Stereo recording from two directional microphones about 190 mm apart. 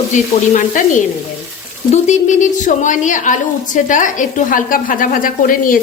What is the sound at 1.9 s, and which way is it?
A woman's voice, 40° left (ahead or behind).